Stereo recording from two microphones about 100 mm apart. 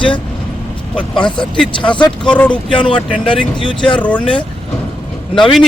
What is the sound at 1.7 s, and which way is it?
Speech, 50° left (ahead or behind).